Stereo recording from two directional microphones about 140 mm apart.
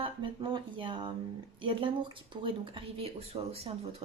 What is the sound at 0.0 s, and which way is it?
A woman's voice, 35° right (ahead or behind).